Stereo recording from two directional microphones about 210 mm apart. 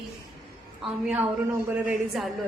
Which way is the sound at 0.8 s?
5° right (ahead or behind).